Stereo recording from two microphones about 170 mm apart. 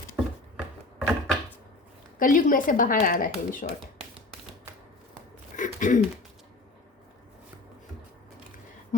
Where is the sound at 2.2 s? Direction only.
55° left (ahead or behind).